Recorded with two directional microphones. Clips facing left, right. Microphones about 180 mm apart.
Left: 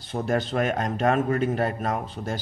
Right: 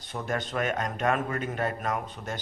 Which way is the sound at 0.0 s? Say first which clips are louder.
Left 6 dB; 30° left (ahead or behind).